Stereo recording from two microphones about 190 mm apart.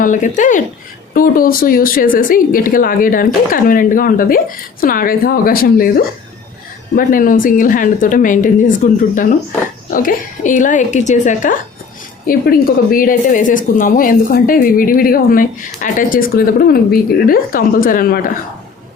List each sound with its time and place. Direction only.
0.0 s a woman's voice: 40° left (ahead or behind)
6.9 s a woman's voice: 45° left (ahead or behind)